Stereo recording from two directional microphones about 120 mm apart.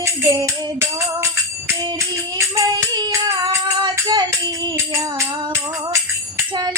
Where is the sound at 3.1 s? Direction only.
35° right (ahead or behind).